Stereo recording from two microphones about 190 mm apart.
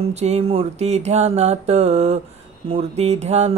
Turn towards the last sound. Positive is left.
turn(degrees=-35)  # may be behind; listen again after turning